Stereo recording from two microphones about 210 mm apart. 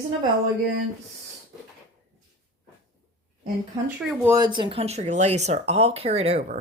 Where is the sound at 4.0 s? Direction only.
15° right (ahead or behind).